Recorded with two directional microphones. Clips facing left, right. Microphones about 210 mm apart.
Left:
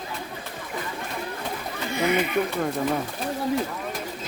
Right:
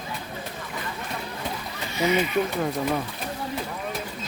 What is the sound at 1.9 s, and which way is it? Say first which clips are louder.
Speech: even; 55° left (ahead or behind).